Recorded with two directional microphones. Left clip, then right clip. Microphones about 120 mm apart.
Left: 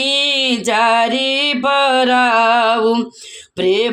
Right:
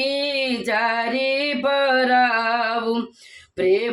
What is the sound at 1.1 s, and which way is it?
Music, 35° right (ahead or behind).